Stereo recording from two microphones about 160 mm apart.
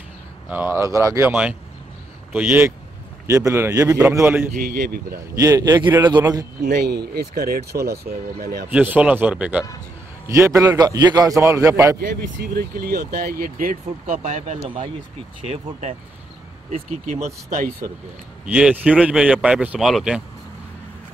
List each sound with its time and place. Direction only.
0.5 s a man's voice: 15° right (ahead or behind)
4.6 s speech: 70° right (ahead or behind)
5.3 s a man's voice: 20° right (ahead or behind)
6.6 s speech: 90° right
7.2 s speech: 70° right (ahead or behind)
8.6 s a man's voice: 10° right (ahead or behind)
12.0 s speech: 70° right (ahead or behind)
14.2 s speech: 45° right (ahead or behind)
18.4 s speech: 5° right (ahead or behind)